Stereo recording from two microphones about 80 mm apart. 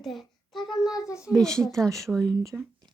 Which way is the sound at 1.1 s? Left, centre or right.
Centre.